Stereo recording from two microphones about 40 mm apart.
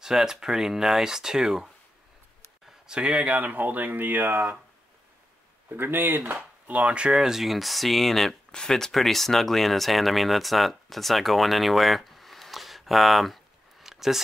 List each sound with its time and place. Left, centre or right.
0.0 s speech: centre
2.9 s speech: right
3.3 s speech: right
5.7 s speech: right
6.7 s speech: right
7.2 s speech: centre
8.5 s speech: centre